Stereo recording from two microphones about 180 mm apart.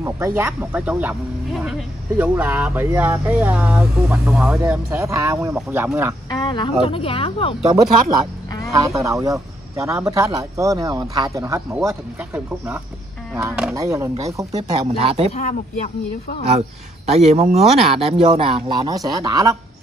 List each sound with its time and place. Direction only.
0.0 s speech: 15° right (ahead or behind)
6.3 s speech: 25° left (ahead or behind)
8.7 s speech: 15° right (ahead or behind)
13.3 s speech: 5° right (ahead or behind)
13.7 s speech: 15° right (ahead or behind)
14.6 s speech: 35° right (ahead or behind)
16.4 s speech: 35° right (ahead or behind); by 19.5 s 20° right (ahead or behind)